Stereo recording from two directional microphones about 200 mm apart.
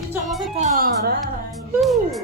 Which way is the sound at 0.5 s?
35° right (ahead or behind).